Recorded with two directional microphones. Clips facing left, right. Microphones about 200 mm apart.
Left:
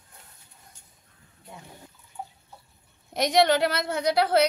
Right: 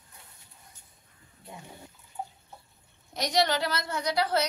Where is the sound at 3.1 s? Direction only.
55° left (ahead or behind).